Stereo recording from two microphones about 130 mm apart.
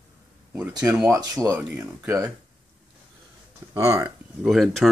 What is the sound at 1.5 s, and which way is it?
Speech, 10° right (ahead or behind).